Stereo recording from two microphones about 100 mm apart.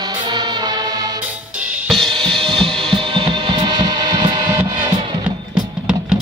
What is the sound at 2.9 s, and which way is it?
Music, 60° right (ahead or behind).